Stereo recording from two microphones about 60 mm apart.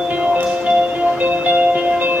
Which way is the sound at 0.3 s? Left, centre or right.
Right.